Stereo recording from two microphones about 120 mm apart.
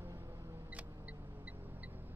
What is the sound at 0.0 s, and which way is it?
Music, 25° right (ahead or behind).